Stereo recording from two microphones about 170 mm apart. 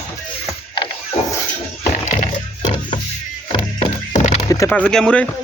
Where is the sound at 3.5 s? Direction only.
40° left (ahead or behind).